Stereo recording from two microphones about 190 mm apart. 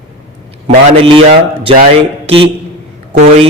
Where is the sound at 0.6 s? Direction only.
30° right (ahead or behind).